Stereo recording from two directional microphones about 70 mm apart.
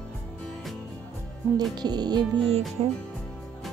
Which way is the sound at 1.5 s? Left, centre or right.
Right.